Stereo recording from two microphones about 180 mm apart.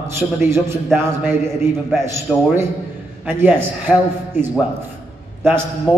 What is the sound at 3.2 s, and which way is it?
A man's voice, 10° right (ahead or behind).